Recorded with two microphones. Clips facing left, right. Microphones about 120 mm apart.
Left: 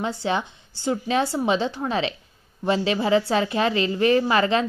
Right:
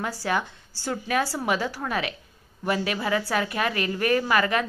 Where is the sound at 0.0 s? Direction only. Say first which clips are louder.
Left 2 dB; 25° left (ahead or behind).